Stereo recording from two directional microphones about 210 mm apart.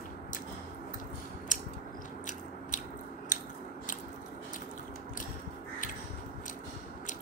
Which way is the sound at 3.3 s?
40° left (ahead or behind).